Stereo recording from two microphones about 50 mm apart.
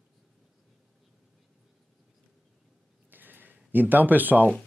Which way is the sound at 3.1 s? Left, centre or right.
Right.